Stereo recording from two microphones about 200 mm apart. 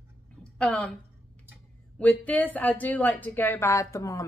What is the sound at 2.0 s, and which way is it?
A woman's voice, 5° left (ahead or behind).